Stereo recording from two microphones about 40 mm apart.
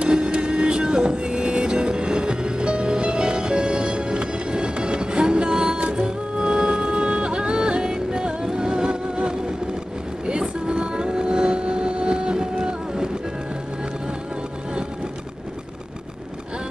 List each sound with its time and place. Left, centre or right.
0.0 s vehicle: right
5.9 s music: right